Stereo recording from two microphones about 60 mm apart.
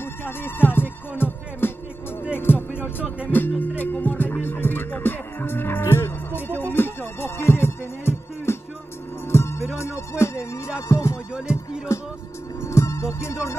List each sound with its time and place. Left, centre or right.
0.0 s music: left